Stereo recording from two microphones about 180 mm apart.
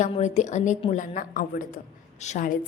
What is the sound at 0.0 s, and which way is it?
A woman's voice, 40° left (ahead or behind).